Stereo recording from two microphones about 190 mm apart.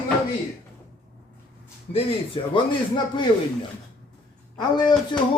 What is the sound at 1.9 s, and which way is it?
Speech, 30° left (ahead or behind).